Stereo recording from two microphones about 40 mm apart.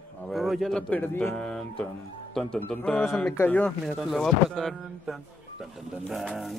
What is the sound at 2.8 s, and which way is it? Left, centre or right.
Speech, left.